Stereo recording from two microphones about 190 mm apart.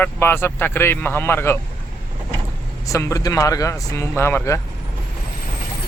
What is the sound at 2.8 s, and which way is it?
Speech, 15° left (ahead or behind).